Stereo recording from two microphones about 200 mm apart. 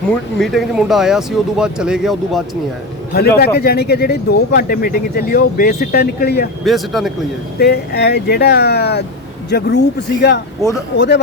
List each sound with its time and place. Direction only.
0.3 s speech: centre (ahead or behind)
3.1 s speech: 50° left (ahead or behind)
6.7 s speech: centre (ahead or behind)
7.6 s speech: 55° left (ahead or behind)